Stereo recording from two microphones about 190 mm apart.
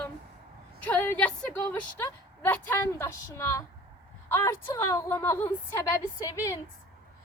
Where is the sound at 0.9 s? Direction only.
5° left (ahead or behind).